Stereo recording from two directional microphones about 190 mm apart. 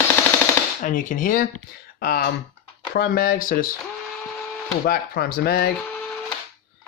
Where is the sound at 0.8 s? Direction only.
45° left (ahead or behind).